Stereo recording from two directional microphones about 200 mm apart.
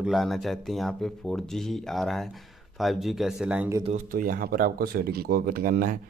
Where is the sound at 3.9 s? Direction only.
45° right (ahead or behind).